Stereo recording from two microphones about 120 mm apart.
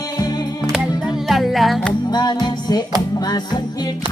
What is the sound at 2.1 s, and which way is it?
Music, 35° left (ahead or behind).